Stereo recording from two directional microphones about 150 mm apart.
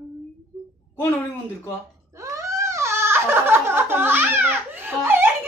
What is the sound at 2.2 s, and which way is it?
Goat, 20° right (ahead or behind).